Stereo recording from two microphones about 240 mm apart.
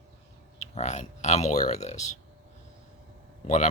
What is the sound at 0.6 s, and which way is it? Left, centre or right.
Speech, left.